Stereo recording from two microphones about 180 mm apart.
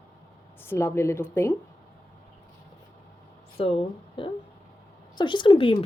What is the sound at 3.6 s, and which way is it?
Speech, 30° left (ahead or behind).